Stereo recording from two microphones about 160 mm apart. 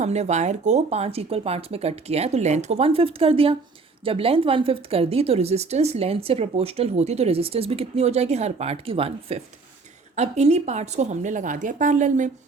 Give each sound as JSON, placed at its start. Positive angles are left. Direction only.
{"t": 0.0, "sound": "a woman's voice", "side_deg": -45}